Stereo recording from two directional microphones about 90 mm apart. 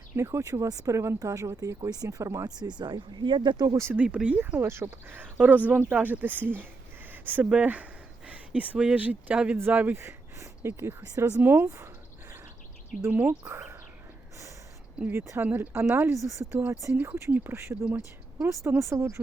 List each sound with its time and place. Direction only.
0.2 s speech: 35° right (ahead or behind)
2.6 s speech: 55° right (ahead or behind)
3.9 s speech: 15° right (ahead or behind); by 11.9 s 30° right (ahead or behind)
13.1 s speech: 25° right (ahead or behind)
15.1 s speech: 35° right (ahead or behind)
15.4 s speech: 20° right (ahead or behind)
15.7 s speech: 30° right (ahead or behind)